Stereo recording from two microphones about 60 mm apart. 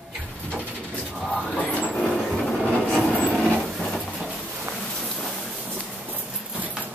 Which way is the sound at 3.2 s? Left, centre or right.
Centre.